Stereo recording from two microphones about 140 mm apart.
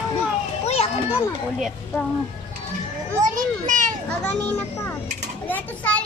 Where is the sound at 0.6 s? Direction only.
45° left (ahead or behind).